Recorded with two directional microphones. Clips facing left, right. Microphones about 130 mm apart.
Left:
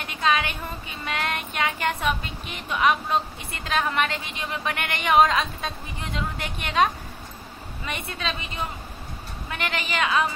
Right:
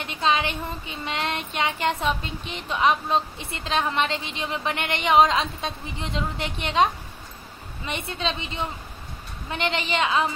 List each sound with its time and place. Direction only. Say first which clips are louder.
0.0 s child singing: right 1 dB; 25° right (ahead or behind)